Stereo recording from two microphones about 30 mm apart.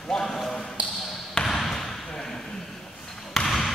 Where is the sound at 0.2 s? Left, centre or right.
Centre.